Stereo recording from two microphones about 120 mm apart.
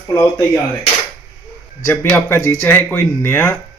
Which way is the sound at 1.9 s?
20° left (ahead or behind).